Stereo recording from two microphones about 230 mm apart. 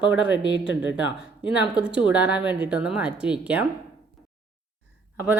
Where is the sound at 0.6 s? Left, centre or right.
Left.